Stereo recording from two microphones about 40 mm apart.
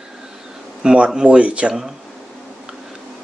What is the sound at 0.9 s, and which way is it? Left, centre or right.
Speech, right.